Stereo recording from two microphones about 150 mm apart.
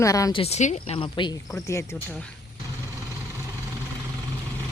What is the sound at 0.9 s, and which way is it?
Speech, 30° left (ahead or behind).